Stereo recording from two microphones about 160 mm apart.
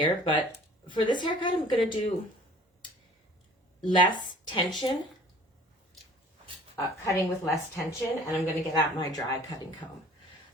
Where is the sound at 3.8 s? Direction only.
30° left (ahead or behind).